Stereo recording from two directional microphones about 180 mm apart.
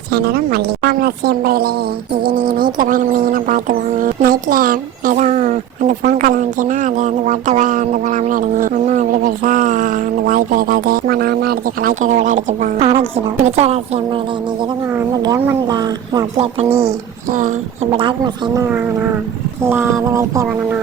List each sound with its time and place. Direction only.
0.1 s a woman's voice: 60° right (ahead or behind); by 14.2 s 35° right (ahead or behind)
14.9 s speech: 15° right (ahead or behind)
18.5 s a sound: 10° right (ahead or behind)